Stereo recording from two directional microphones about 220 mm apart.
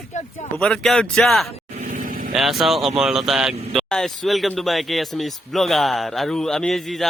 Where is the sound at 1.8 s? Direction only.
40° right (ahead or behind).